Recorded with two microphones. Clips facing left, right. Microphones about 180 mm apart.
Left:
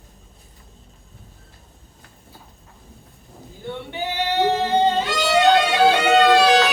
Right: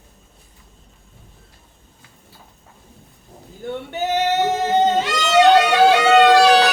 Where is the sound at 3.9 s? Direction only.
45° right (ahead or behind).